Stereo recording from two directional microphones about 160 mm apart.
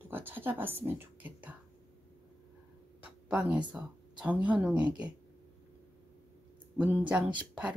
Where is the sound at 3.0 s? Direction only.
10° right (ahead or behind).